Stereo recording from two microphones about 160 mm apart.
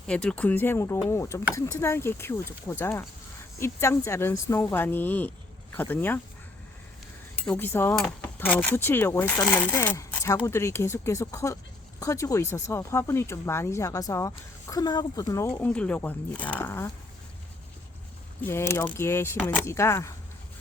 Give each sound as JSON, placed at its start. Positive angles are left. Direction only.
{"t": 0.1, "sound": "speech", "side_deg": 5}
{"t": 7.4, "sound": "speech", "side_deg": 10}
{"t": 18.4, "sound": "speech", "side_deg": 15}